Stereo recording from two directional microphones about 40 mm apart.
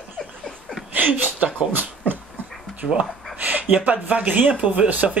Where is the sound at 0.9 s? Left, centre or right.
Right.